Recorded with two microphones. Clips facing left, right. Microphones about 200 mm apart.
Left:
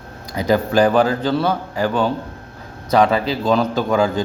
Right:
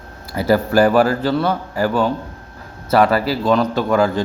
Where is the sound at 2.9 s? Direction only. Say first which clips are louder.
Right 1 dB; 5° right (ahead or behind).